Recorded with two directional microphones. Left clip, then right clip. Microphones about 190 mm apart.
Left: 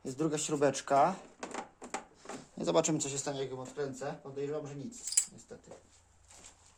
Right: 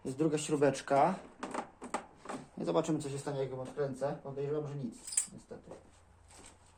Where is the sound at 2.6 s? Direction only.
60° left (ahead or behind).